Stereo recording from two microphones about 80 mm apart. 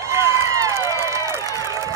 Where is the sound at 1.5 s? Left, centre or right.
Left.